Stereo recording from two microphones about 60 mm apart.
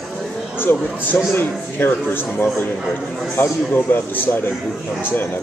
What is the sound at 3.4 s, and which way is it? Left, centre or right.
A man's voice, left.